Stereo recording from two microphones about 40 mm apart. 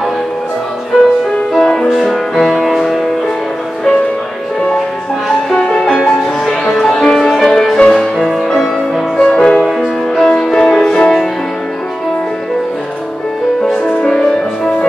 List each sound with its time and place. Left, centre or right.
0.9 s music: centre
1.6 s music: centre
2.0 s music: centre
5.6 s music: left
6.0 s music: centre
7.8 s music: centre
9.1 s music: left
9.7 s music: centre
14.0 s music: centre